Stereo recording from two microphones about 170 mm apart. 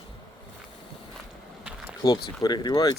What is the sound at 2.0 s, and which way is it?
Speech, 20° left (ahead or behind).